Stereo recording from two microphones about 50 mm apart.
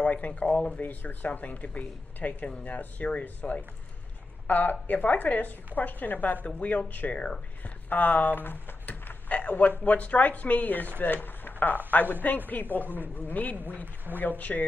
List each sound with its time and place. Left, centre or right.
0.0 s speech: left